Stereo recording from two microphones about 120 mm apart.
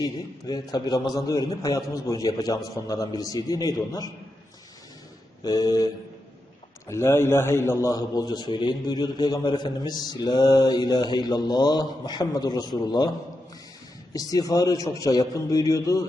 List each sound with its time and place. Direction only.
0.0 s a man's voice: 35° left (ahead or behind)
5.4 s a man's voice: 35° left (ahead or behind)
6.8 s a man's voice: 20° left (ahead or behind)